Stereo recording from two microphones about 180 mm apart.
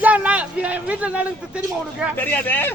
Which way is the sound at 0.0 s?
5° right (ahead or behind).